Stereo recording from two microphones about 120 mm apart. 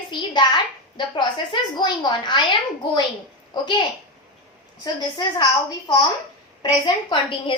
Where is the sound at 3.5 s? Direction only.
40° left (ahead or behind).